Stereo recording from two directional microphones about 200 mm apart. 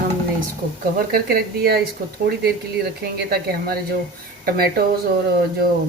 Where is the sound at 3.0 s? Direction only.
50° right (ahead or behind).